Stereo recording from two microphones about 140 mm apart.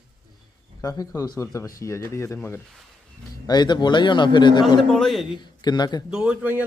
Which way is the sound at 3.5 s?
30° left (ahead or behind).